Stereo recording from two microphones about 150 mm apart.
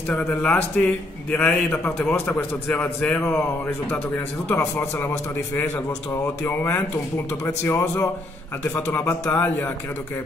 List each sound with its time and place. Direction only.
0.1 s a man's voice: 10° left (ahead or behind)
6.4 s a man's voice: 15° left (ahead or behind)